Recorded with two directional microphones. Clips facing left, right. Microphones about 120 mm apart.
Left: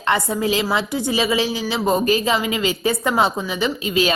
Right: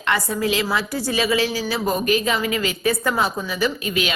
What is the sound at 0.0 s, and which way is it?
A woman's voice, 25° left (ahead or behind).